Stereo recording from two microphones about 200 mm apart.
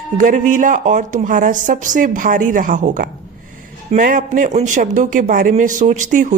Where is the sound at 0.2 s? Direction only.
40° right (ahead or behind).